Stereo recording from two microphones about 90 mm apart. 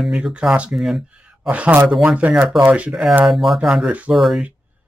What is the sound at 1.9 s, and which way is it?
Speech, 10° right (ahead or behind).